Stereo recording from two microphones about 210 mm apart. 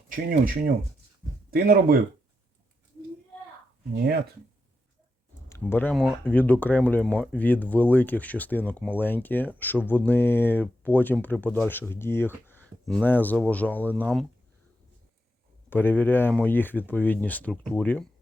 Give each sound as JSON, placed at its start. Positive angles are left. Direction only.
{"t": 0.3, "sound": "speech", "side_deg": -45}
{"t": 5.5, "sound": "speech", "side_deg": 10}
{"t": 15.7, "sound": "speech", "side_deg": 10}